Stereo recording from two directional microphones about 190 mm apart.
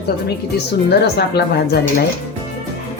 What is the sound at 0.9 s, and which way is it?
Speech, 60° left (ahead or behind).